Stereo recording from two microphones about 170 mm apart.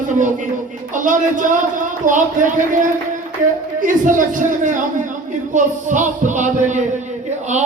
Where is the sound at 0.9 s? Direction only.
50° right (ahead or behind).